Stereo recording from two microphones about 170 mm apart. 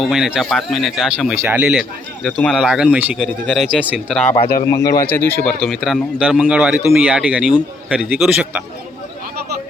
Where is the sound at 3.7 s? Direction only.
10° right (ahead or behind).